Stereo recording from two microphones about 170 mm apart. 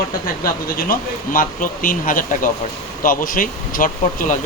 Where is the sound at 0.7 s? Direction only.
55° left (ahead or behind).